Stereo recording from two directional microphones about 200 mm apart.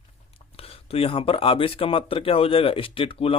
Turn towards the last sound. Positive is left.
turn(degrees=25)  # may be behind; listen again after turning